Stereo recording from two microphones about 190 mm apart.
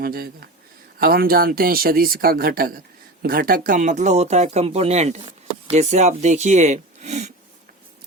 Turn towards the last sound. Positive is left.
turn(degrees=-35)  # may be behind; listen again after turning